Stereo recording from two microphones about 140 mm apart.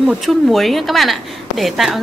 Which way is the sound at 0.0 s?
Centre (ahead or behind).